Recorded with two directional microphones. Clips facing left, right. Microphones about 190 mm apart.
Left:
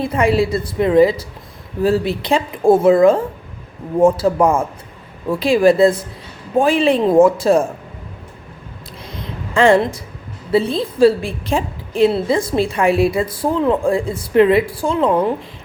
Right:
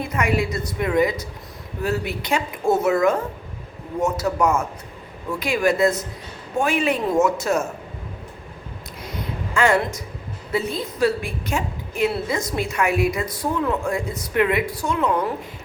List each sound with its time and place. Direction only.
0.0 s a woman's voice: 30° left (ahead or behind)
9.6 s a woman's voice: 30° left (ahead or behind)